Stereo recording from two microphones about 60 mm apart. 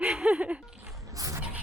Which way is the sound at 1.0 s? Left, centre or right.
Right.